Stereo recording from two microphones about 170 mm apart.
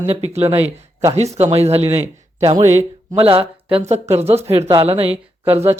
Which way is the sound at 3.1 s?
35° right (ahead or behind).